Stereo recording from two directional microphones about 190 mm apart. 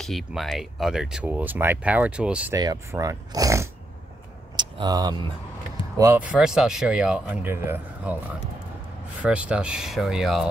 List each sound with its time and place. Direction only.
0.0 s speech: centre (ahead or behind)
2.5 s speech: 20° right (ahead or behind)
5.9 s speech: 10° right (ahead or behind)
9.2 s speech: 5° right (ahead or behind)